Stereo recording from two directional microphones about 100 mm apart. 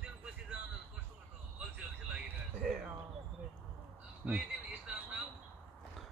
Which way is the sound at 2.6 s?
5° right (ahead or behind).